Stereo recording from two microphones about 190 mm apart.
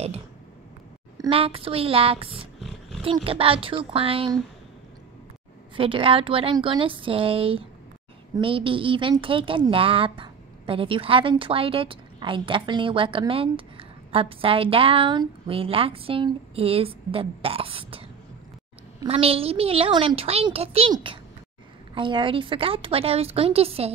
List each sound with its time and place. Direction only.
1.1 s speech: 25° right (ahead or behind)
5.8 s speech: 30° right (ahead or behind)
19.0 s a woman's voice: 30° right (ahead or behind)